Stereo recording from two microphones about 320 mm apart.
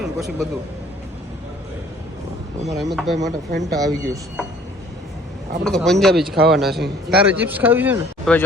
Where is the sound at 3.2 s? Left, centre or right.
Right.